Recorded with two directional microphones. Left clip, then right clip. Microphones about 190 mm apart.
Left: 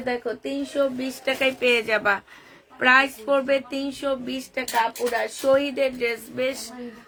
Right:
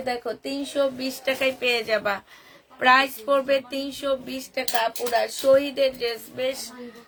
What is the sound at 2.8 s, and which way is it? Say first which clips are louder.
Speech: even; 20° left (ahead or behind).